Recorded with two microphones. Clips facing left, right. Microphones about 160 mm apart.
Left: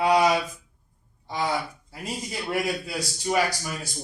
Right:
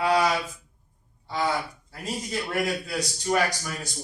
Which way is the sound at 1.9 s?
10° left (ahead or behind).